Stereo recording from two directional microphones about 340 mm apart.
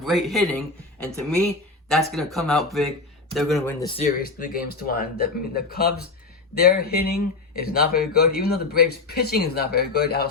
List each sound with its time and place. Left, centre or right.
0.0 s speech: centre
1.9 s speech: centre; by 10.2 s left